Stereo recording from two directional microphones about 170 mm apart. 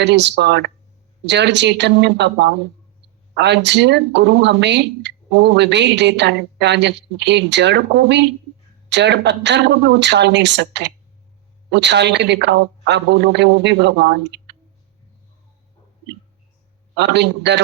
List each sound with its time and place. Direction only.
0.0 s speech: 90° right
16.9 s speech: 90° right